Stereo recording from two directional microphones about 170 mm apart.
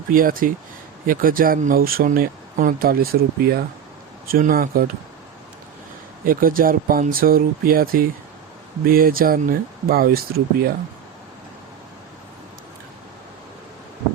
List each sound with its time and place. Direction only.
0.1 s speech: 55° right (ahead or behind)
6.2 s speech: 55° right (ahead or behind)